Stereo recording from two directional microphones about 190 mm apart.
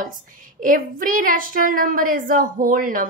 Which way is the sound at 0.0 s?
45° right (ahead or behind).